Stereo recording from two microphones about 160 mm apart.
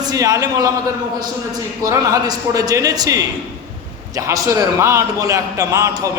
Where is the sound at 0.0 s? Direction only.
25° right (ahead or behind).